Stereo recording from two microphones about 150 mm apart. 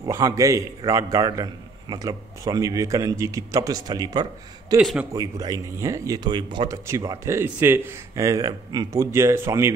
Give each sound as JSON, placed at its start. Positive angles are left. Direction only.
{"t": 0.0, "sound": "a man's voice", "side_deg": -20}